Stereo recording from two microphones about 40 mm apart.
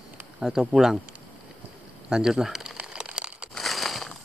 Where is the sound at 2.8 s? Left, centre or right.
Right.